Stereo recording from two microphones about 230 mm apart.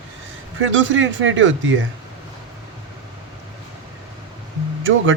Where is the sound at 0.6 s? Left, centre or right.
Right.